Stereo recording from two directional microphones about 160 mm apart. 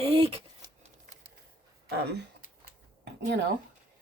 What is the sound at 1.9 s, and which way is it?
Speech, 90° right.